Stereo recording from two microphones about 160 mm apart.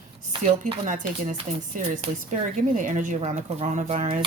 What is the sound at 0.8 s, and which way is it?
A woman's voice, 55° right (ahead or behind).